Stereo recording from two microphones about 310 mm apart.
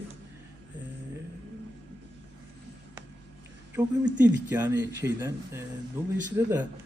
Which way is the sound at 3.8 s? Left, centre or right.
Centre.